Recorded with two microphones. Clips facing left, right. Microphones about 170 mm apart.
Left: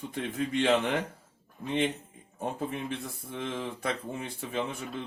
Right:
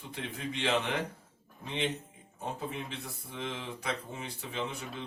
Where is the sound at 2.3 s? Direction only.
55° left (ahead or behind).